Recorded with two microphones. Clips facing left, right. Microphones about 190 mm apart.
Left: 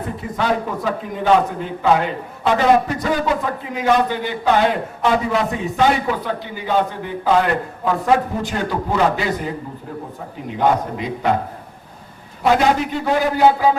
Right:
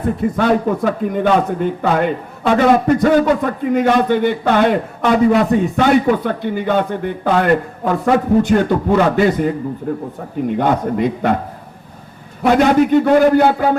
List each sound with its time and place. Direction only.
0.2 s a man's voice: 55° right (ahead or behind)
12.4 s a man's voice: 55° right (ahead or behind)